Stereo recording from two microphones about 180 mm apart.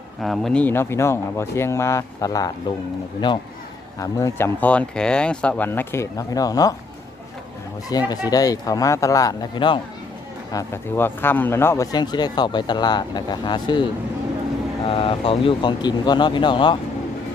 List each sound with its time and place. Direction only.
0.2 s speech: centre (ahead or behind); by 6.7 s 20° left (ahead or behind)
7.9 s speech: 20° left (ahead or behind)
10.5 s speech: 15° left (ahead or behind)
14.8 s speech: 30° left (ahead or behind)